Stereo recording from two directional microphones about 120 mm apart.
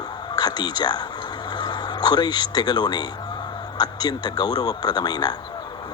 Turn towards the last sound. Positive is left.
turn(degrees=35)  # may be behind; listen again after turning